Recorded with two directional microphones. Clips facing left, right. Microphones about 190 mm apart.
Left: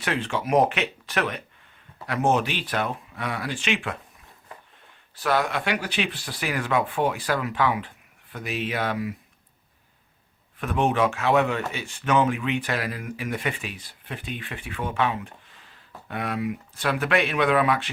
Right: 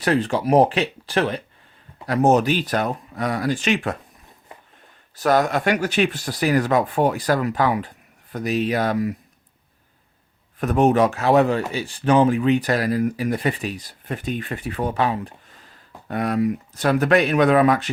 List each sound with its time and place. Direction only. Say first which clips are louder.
0.0 s speech: right 7 dB; 40° right (ahead or behind)
5.1 s speech: right 6 dB; 45° right (ahead or behind)
10.6 s speech: right 6 dB; 40° right (ahead or behind)